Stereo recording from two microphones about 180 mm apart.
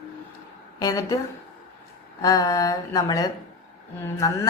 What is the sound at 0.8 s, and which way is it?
Speech, 20° left (ahead or behind).